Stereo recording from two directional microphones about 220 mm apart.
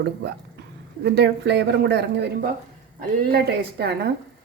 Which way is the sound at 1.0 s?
50° right (ahead or behind).